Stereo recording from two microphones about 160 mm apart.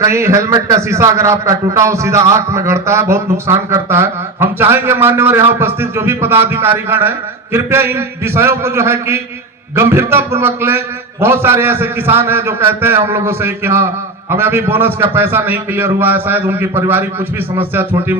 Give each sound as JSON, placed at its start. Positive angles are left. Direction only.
{"t": 0.0, "sound": "a man's voice", "side_deg": -15}